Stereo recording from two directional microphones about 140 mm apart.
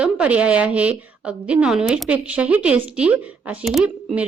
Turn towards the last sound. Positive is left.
turn(degrees=-5)  # may be behind; listen again after turning